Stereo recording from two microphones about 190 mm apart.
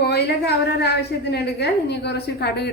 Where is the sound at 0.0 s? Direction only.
60° left (ahead or behind).